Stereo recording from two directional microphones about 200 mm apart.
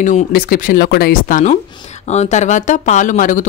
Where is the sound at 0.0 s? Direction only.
45° left (ahead or behind).